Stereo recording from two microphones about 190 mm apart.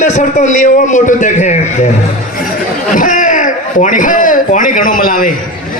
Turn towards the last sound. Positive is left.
turn(degrees=45)  # may be behind; listen again after turning